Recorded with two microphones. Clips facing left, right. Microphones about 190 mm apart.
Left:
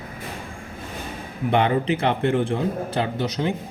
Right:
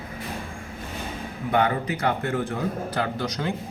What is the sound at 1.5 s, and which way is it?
A man's voice, 25° left (ahead or behind).